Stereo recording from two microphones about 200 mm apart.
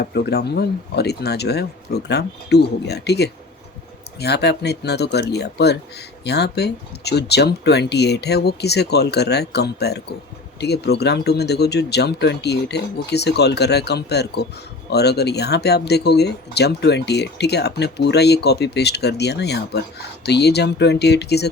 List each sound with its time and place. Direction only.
0.0 s speech: 55° left (ahead or behind)